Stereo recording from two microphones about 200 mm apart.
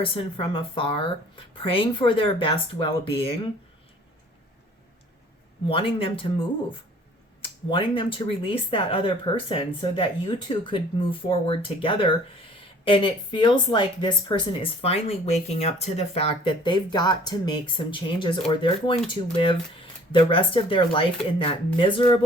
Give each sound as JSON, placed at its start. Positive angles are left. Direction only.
{"t": 0.0, "sound": "speech", "side_deg": 25}
{"t": 5.6, "sound": "speech", "side_deg": 25}